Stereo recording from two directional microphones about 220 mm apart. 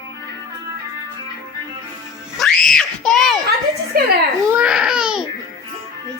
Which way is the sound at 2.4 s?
5° left (ahead or behind).